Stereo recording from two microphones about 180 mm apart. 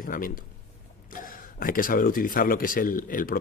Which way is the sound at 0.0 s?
50° left (ahead or behind).